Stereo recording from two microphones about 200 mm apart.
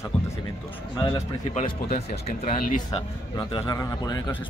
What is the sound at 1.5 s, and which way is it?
A man's voice, 35° left (ahead or behind).